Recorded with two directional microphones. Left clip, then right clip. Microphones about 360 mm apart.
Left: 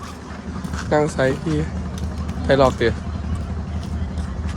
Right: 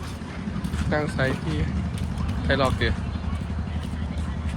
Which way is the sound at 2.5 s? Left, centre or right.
Centre.